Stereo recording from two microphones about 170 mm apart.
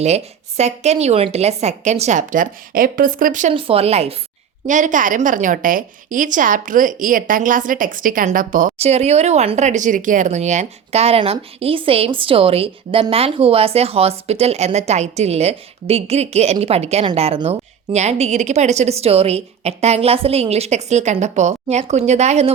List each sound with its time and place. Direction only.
0.0 s a woman's voice: 40° right (ahead or behind)
3.5 s a woman's voice: 35° right (ahead or behind); by 8.7 s 50° right (ahead or behind)
8.8 s speech: 40° right (ahead or behind)